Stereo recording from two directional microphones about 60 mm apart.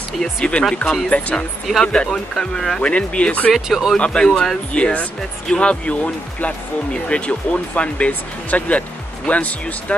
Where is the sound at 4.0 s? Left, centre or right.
Centre.